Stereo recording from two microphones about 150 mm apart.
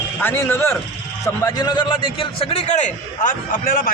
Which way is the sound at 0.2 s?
15° left (ahead or behind).